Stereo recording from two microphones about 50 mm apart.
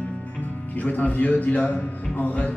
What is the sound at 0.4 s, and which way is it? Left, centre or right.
Speech, left.